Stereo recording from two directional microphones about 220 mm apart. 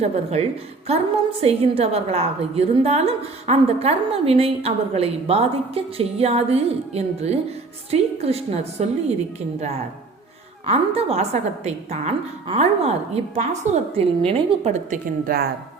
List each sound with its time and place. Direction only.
0.0 s a woman's voice: 30° right (ahead or behind)
10.7 s a woman's voice: 30° right (ahead or behind)